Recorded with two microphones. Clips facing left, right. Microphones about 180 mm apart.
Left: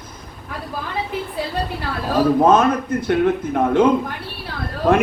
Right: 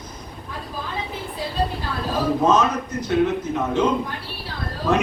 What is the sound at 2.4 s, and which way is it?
A man's voice, 55° left (ahead or behind).